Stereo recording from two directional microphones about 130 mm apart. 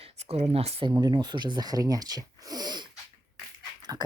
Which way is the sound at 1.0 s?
30° right (ahead or behind).